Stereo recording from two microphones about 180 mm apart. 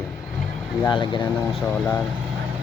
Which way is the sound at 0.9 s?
25° left (ahead or behind).